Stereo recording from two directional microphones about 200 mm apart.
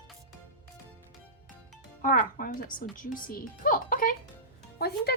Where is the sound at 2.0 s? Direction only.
40° left (ahead or behind).